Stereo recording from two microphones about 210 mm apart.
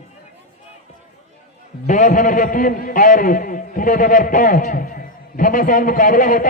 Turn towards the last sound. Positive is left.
turn(degrees=40)  # may be behind; listen again after turning